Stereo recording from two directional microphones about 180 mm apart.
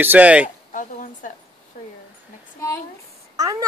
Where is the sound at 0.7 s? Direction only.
45° left (ahead or behind).